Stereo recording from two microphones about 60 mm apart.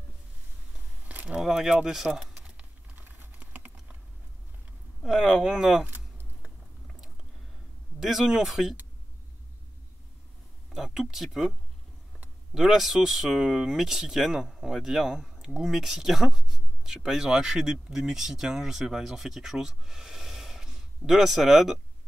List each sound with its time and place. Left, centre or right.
1.0 s a sound: right
1.4 s speech: centre
3.0 s typing: right
5.0 s speech: centre
8.0 s speech: centre
10.7 s speech: centre
12.5 s speech: centre